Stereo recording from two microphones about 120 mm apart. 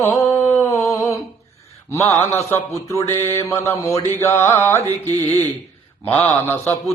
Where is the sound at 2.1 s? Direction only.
20° left (ahead or behind).